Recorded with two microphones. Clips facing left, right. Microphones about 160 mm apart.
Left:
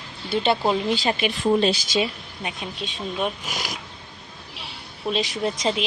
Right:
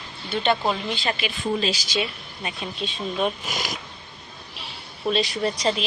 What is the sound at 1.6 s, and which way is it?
Speech, 55° left (ahead or behind).